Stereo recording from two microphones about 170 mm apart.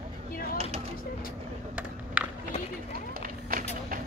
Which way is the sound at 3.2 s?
55° right (ahead or behind).